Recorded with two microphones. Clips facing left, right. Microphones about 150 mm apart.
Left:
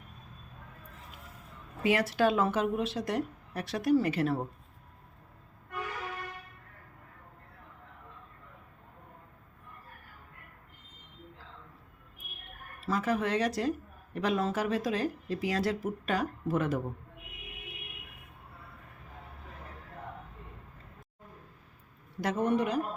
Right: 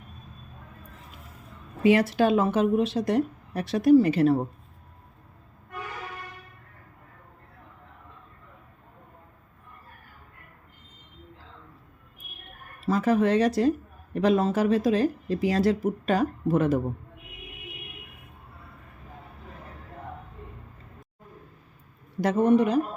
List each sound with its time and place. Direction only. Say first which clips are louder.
1.8 s speech: right 6 dB; 25° right (ahead or behind)
12.9 s speech: right 8 dB; 30° right (ahead or behind)
22.2 s speech: right 8 dB; 30° right (ahead or behind)